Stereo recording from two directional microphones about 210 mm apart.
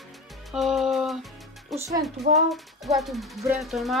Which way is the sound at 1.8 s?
15° right (ahead or behind).